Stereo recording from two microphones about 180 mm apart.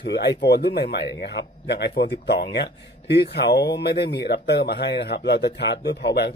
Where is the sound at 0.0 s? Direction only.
65° left (ahead or behind).